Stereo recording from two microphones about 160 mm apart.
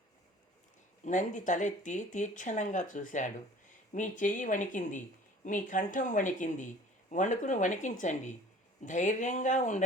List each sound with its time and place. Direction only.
1.0 s speech: 50° left (ahead or behind)